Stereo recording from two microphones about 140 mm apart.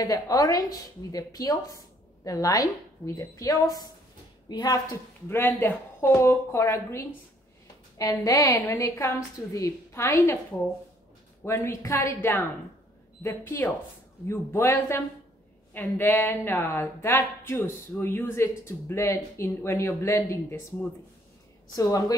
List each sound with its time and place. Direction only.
0.0 s a woman's voice: 25° left (ahead or behind)
5.3 s a woman's voice: 15° left (ahead or behind)
11.4 s a woman's voice: 20° left (ahead or behind)
21.7 s a woman's voice: 25° left (ahead or behind)